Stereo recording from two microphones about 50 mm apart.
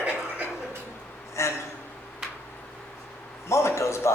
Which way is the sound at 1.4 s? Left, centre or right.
Left.